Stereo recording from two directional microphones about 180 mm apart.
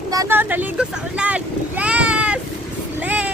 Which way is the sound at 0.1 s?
15° right (ahead or behind).